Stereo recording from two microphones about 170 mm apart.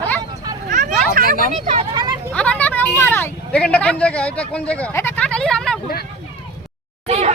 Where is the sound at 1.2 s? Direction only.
60° right (ahead or behind).